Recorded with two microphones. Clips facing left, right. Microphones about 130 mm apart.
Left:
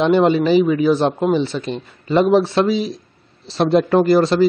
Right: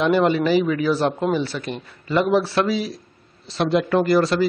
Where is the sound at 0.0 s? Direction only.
25° left (ahead or behind).